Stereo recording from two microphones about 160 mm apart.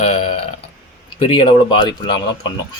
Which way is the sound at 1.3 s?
35° left (ahead or behind).